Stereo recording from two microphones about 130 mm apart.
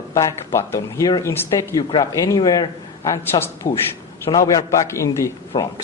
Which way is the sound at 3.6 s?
90° left.